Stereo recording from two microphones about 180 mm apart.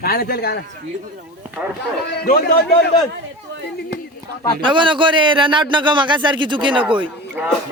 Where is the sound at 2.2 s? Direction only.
65° left (ahead or behind).